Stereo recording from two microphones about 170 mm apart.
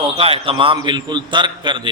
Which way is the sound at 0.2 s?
35° right (ahead or behind).